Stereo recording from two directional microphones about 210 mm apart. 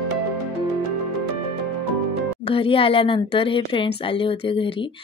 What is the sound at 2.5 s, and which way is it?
Speech, 25° left (ahead or behind).